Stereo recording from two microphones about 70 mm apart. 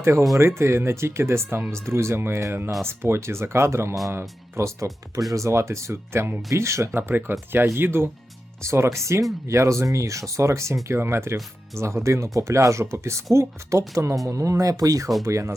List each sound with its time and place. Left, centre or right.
0.0 s speech: right
7.1 s speech: right